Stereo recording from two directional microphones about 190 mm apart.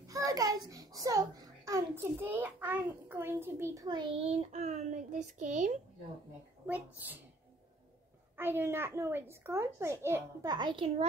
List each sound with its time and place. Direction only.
0.0 s a child's voice: 20° right (ahead or behind); by 5.7 s 40° right (ahead or behind)
8.4 s a child's voice: 10° right (ahead or behind); by 11.1 s 30° right (ahead or behind)